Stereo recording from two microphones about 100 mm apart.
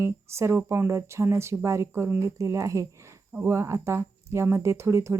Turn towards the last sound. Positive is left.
turn(degrees=-30)  # may be behind; listen again after turning